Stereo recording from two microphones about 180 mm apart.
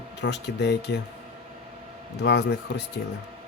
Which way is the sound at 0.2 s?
75° left (ahead or behind).